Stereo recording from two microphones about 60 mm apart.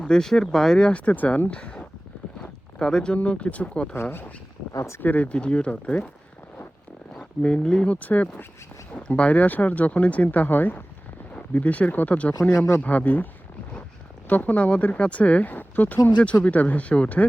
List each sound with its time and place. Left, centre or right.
0.0 s speech: centre; by 1.5 s left
1.5 s speech: centre
2.4 s a sound: centre
3.2 s speech: left
4.0 s speech: left
4.7 s speech: left
4.9 s speech: left
7.4 s speech: centre
7.9 s speech: left
12.5 s speech: left
12.8 s speech: left
14.3 s speech: left